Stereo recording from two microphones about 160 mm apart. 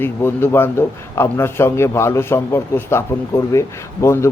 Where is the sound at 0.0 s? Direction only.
15° left (ahead or behind).